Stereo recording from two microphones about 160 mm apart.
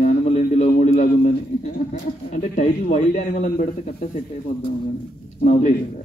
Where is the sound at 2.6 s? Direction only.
50° left (ahead or behind).